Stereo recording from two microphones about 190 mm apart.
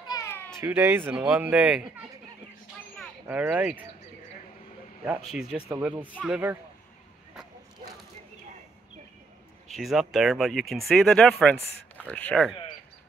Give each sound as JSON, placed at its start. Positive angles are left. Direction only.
{"t": 0.0, "sound": "cat", "side_deg": 15}
{"t": 0.6, "sound": "speech", "side_deg": -10}
{"t": 3.3, "sound": "speech", "side_deg": -10}
{"t": 5.3, "sound": "speech", "side_deg": 0}
{"t": 9.7, "sound": "speech", "side_deg": 0}